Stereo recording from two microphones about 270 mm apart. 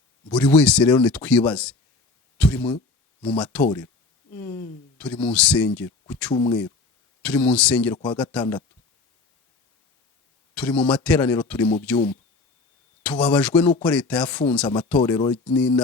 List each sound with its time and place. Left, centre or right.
0.3 s speech: centre
2.4 s a sound: centre
3.2 s speech: centre
4.4 s a sound: centre
4.9 s speech: centre
6.3 s speech: centre
7.2 s speech: centre
10.5 s speech: centre